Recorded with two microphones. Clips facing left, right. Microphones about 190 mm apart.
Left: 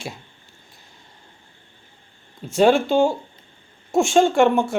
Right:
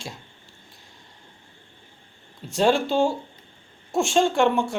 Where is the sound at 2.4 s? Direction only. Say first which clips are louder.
Left 4 dB; 50° left (ahead or behind).